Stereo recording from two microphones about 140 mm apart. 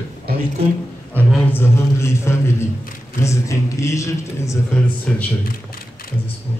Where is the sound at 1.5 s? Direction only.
15° left (ahead or behind).